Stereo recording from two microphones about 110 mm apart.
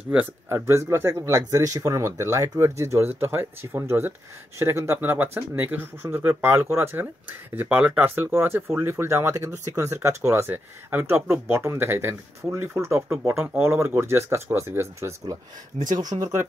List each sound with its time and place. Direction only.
0.5 s speech: 25° right (ahead or behind)